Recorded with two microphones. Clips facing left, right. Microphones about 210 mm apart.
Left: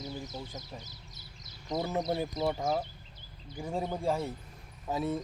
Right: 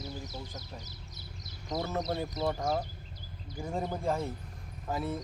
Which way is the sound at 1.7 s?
10° left (ahead or behind).